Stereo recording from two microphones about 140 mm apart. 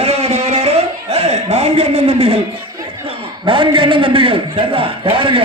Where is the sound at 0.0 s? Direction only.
50° right (ahead or behind).